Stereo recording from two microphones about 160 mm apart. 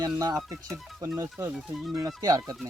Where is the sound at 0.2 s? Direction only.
20° right (ahead or behind).